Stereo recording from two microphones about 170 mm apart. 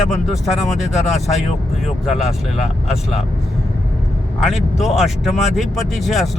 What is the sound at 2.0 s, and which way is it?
Speech, centre (ahead or behind).